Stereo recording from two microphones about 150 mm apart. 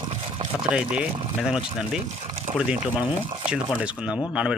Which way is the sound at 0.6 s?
10° right (ahead or behind).